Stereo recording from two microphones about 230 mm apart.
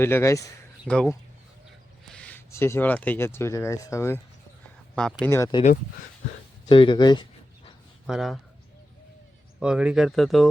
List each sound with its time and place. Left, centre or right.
0.0 s speech: centre
6.7 s a sound: left
8.0 s speech: centre
9.6 s speech: centre